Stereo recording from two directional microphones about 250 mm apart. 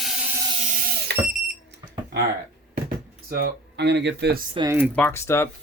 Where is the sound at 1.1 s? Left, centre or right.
Right.